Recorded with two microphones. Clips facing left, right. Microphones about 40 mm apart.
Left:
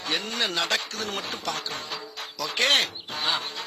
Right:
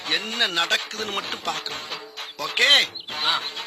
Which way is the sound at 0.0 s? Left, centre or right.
Right.